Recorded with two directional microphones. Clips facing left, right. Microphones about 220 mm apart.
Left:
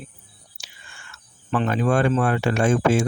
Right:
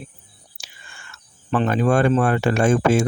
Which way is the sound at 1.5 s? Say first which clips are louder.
Right 2 dB; 40° right (ahead or behind).